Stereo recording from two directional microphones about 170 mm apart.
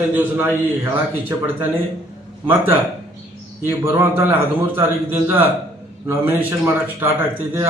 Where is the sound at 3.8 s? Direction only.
15° right (ahead or behind).